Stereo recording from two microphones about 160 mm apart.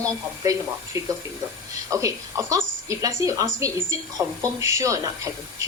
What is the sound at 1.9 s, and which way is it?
Speech, 20° right (ahead or behind).